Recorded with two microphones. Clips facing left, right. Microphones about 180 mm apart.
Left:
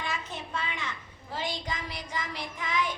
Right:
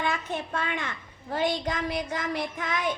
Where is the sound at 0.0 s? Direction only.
60° right (ahead or behind).